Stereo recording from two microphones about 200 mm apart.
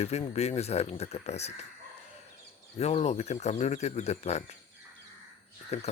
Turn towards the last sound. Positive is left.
turn(degrees=35)  # may be behind; listen again after turning